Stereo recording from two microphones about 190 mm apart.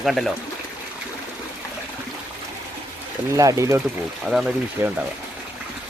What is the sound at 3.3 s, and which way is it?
Speech, 15° right (ahead or behind).